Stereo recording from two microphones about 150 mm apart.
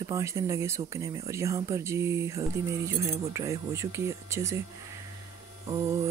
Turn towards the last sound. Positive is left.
turn(degrees=-20)  # may be behind; listen again after turning